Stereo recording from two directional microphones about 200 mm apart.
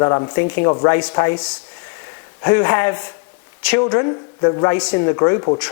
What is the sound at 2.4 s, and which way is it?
Speech, 15° left (ahead or behind).